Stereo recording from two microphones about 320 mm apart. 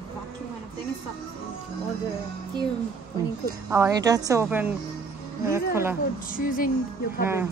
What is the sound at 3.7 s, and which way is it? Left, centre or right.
Speech, centre.